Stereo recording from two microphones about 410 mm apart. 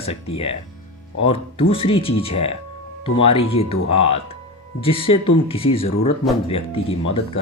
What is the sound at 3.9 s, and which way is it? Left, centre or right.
Speech, left.